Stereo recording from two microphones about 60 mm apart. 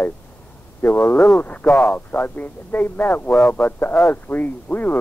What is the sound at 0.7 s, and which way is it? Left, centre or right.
A man's voice, left.